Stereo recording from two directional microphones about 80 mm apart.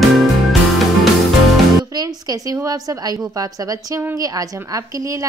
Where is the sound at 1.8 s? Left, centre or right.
Right.